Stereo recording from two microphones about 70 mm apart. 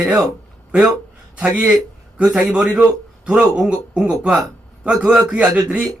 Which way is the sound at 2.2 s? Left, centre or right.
Centre.